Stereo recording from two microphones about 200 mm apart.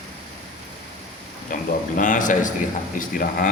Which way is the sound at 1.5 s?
45° left (ahead or behind).